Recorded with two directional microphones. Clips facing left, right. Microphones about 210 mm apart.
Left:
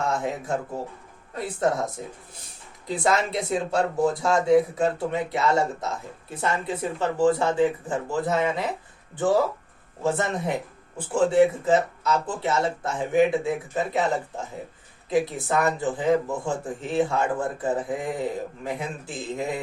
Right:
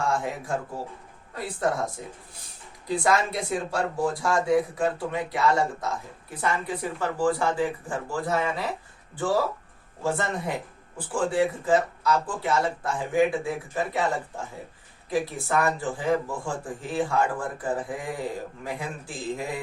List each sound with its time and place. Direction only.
0.0 s speech: 20° left (ahead or behind)